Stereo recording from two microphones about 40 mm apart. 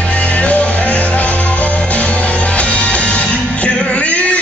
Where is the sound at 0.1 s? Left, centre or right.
Left.